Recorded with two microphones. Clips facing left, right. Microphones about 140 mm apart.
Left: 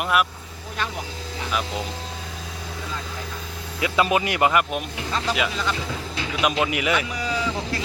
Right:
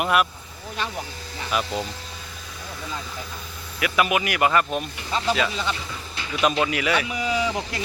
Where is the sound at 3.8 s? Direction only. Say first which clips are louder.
Left 1 dB; 25° left (ahead or behind).